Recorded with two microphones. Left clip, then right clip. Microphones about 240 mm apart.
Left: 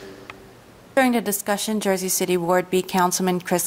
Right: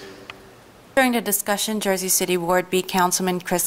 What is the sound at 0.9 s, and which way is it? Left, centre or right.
A man's voice, centre.